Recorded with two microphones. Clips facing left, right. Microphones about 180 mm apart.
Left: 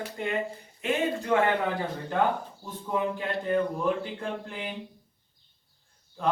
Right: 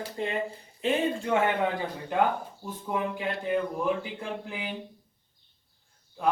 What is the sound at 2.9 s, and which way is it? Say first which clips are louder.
Speech: left 2 dB; 10° right (ahead or behind).